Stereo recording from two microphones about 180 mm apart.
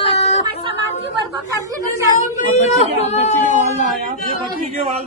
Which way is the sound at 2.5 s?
40° left (ahead or behind).